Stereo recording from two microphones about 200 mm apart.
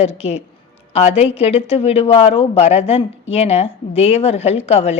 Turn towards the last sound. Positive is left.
turn(degrees=30)  # may be behind; listen again after turning